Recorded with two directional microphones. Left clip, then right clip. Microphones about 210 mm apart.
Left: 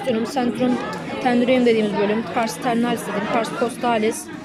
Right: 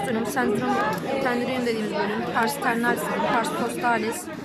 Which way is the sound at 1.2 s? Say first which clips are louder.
Left 12 dB; 15° left (ahead or behind).